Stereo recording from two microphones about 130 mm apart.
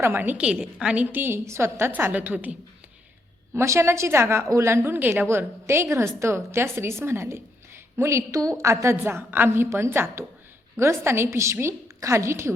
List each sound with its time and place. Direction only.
0.0 s a woman's voice: 15° right (ahead or behind)